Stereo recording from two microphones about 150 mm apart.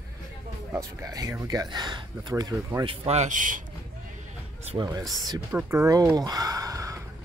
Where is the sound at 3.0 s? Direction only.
50° right (ahead or behind).